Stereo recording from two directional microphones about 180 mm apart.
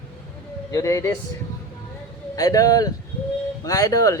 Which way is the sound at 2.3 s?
20° left (ahead or behind).